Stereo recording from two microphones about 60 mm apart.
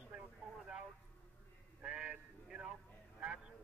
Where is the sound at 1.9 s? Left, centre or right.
Centre.